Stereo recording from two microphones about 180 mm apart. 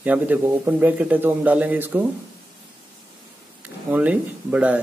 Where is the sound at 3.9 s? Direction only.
10° right (ahead or behind).